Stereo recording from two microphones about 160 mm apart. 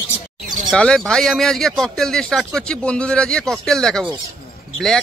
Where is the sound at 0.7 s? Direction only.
5° left (ahead or behind).